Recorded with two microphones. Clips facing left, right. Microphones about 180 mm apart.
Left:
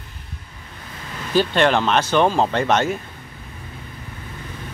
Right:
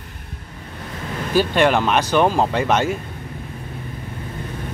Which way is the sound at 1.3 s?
10° right (ahead or behind).